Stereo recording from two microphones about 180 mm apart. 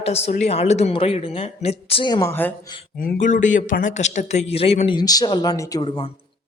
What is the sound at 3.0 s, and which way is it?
A woman's voice, 45° left (ahead or behind).